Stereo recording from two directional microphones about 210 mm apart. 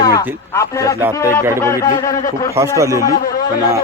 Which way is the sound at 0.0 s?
15° left (ahead or behind).